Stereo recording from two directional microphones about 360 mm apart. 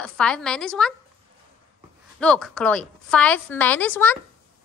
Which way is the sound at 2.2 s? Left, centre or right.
Centre.